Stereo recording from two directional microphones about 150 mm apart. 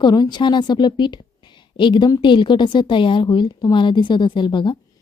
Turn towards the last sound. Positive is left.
turn(degrees=35)  # may be behind; listen again after turning